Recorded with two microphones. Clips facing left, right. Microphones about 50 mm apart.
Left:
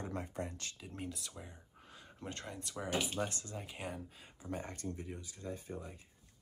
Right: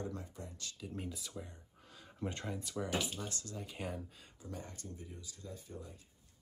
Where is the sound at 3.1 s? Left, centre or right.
Left.